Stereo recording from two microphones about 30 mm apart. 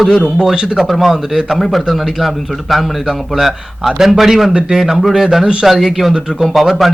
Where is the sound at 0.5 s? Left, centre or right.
Right.